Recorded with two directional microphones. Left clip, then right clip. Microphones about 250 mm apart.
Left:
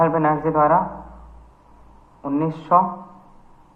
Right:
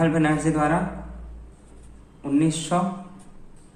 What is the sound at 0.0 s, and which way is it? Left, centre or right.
Speech, centre.